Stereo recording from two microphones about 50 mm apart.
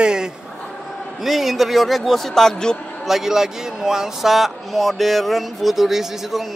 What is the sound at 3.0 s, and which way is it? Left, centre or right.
Speech, centre.